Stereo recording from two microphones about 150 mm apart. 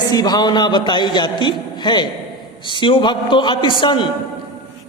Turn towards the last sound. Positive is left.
turn(degrees=35)  # may be behind; listen again after turning